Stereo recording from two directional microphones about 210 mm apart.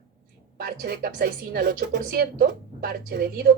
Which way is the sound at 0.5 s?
50° right (ahead or behind).